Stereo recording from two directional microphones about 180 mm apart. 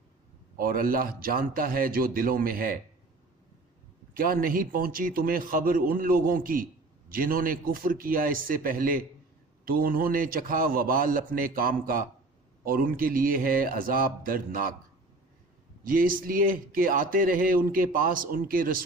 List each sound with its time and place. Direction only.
0.5 s speech: 55° right (ahead or behind)
4.1 s speech: 50° right (ahead or behind)
15.8 s speech: 50° right (ahead or behind)